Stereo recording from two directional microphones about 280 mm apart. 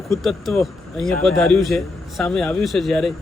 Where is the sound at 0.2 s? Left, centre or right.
Centre.